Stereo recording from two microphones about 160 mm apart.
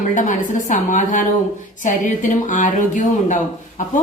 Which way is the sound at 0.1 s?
50° left (ahead or behind).